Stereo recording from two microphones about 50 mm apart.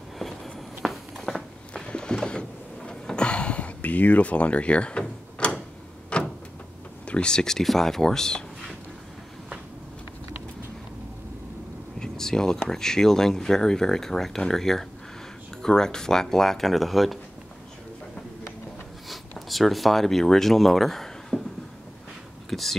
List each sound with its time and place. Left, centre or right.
0.2 s a sound: centre
1.7 s a sound: centre
7.1 s speech: centre
12.0 s speech: centre
19.0 s speech: centre
22.5 s whispering: centre